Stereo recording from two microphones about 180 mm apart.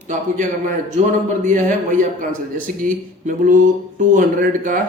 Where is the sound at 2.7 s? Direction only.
5° left (ahead or behind).